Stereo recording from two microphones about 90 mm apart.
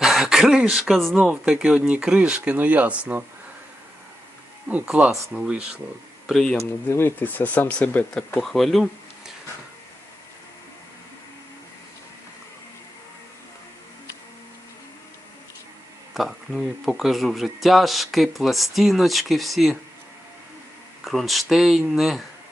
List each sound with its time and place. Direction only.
0.0 s speech: 5° right (ahead or behind)
4.7 s speech: 15° right (ahead or behind)
6.2 s speech: 5° left (ahead or behind)
6.8 s speech: 25° left (ahead or behind)
8.4 s speech: 5° left (ahead or behind)
16.1 s speech: centre (ahead or behind)
21.0 s speech: centre (ahead or behind)